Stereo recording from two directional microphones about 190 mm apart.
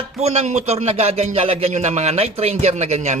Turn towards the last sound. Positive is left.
turn(degrees=-35)  # may be behind; listen again after turning